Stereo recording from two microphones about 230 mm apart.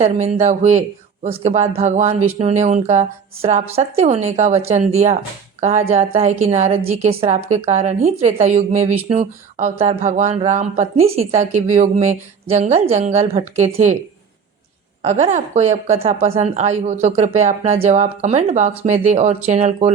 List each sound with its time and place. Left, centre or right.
0.0 s speech: right
15.0 s speech: right